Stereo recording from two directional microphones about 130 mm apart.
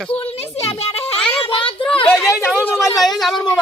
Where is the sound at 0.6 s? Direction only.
50° left (ahead or behind).